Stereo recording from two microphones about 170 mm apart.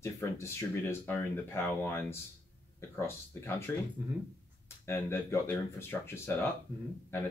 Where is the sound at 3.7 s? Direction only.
10° left (ahead or behind).